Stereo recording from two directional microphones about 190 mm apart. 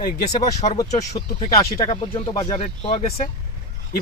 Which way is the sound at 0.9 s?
35° left (ahead or behind).